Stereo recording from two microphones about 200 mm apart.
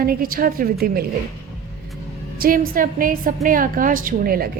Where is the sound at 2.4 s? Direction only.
45° right (ahead or behind).